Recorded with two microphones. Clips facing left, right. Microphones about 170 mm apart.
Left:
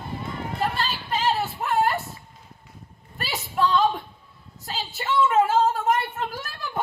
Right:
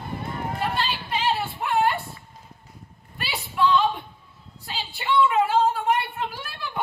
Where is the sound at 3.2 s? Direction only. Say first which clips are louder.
Even; 40° left (ahead or behind).